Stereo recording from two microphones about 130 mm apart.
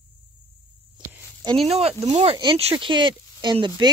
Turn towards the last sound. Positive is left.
turn(degrees=-40)  # may be behind; listen again after turning